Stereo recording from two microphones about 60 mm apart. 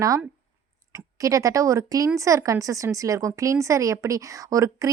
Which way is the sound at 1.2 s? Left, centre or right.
Right.